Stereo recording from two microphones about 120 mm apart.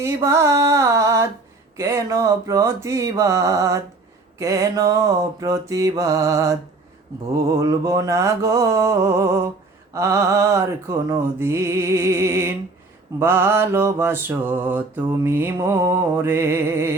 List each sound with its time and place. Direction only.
0.0 s music: 25° right (ahead or behind)